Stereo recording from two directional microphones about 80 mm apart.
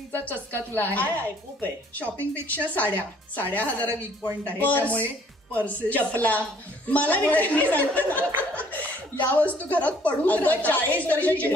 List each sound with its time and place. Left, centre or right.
0.1 s a woman's voice: left